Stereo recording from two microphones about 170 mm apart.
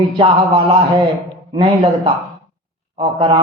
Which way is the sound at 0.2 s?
30° right (ahead or behind).